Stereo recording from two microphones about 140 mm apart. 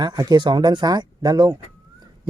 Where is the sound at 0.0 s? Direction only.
30° right (ahead or behind).